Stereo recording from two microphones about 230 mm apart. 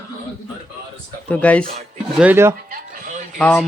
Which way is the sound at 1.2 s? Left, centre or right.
Centre.